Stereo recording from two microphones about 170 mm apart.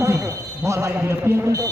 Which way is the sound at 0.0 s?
20° right (ahead or behind).